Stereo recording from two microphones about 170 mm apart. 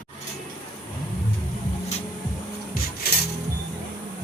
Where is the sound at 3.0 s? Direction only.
65° left (ahead or behind).